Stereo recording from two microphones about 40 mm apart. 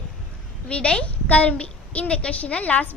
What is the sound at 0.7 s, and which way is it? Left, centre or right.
A woman's voice, left.